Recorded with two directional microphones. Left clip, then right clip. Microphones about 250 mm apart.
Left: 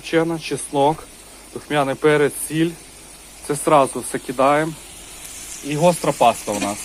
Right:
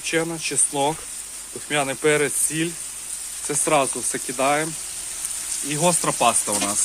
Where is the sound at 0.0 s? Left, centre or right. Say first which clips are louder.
Left 4 dB; centre.